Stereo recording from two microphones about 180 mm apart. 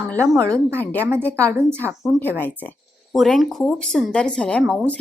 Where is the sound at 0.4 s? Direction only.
15° right (ahead or behind).